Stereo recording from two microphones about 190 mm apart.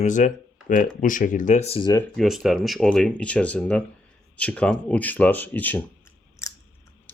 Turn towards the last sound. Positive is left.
turn(degrees=15)  # may be behind; listen again after turning